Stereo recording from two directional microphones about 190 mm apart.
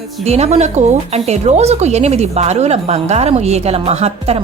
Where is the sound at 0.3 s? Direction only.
35° right (ahead or behind).